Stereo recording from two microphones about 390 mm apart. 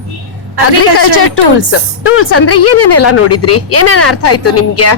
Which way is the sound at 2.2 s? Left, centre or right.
Left.